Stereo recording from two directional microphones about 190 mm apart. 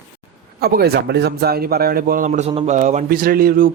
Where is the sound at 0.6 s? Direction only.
55° right (ahead or behind).